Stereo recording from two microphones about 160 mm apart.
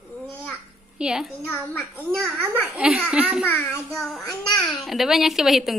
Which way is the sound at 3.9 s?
Centre (ahead or behind).